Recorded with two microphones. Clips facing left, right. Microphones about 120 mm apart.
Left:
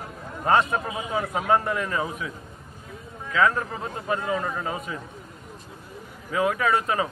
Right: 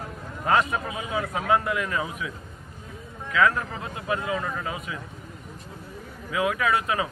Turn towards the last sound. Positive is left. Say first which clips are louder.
# left 1 dB
turn(degrees=25)  # may be behind; listen again after turning